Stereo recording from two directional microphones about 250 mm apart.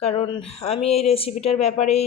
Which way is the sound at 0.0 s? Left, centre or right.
Left.